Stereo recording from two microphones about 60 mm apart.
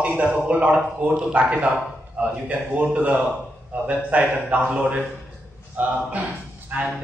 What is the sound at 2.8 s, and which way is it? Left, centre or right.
A man's voice, right.